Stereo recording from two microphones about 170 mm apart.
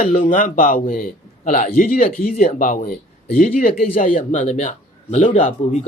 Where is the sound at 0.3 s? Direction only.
50° left (ahead or behind).